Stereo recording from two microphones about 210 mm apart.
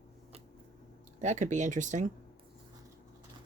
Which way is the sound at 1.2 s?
35° right (ahead or behind).